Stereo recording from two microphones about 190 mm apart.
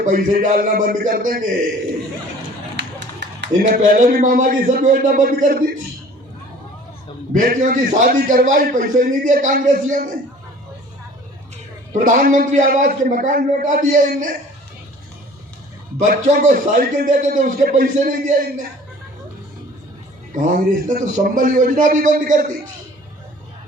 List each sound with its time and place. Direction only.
0.0 s a man's voice: 45° right (ahead or behind)
2.7 s a sound: 65° right (ahead or behind)
3.6 s a man's voice: 45° right (ahead or behind)
7.3 s a man's voice: 45° right (ahead or behind)
11.9 s a man's voice: 45° right (ahead or behind)
16.0 s a man's voice: 45° right (ahead or behind)
20.3 s a man's voice: 45° right (ahead or behind)